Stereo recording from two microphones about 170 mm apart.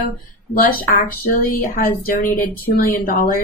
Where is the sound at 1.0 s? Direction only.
55° left (ahead or behind).